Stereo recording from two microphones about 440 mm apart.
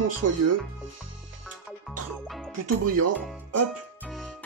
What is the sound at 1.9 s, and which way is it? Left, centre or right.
Music, centre.